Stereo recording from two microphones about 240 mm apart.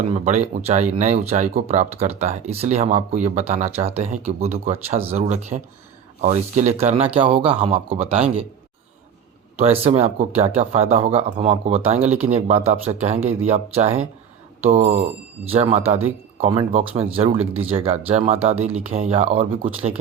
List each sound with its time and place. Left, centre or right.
0.0 s speech: right
9.6 s speech: right